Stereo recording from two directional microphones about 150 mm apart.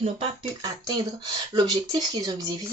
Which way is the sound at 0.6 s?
25° right (ahead or behind).